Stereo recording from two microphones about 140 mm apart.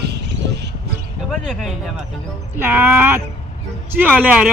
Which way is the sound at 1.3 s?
5° left (ahead or behind).